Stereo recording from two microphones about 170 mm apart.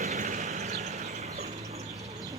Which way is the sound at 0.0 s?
45° right (ahead or behind).